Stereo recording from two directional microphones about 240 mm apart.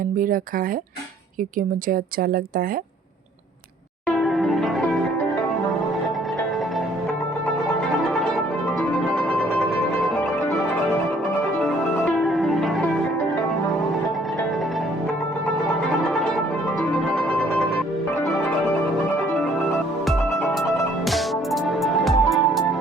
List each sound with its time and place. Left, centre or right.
1.5 s a woman's voice: right
4.0 s zither: centre
12.0 s music: centre
21.1 s music: centre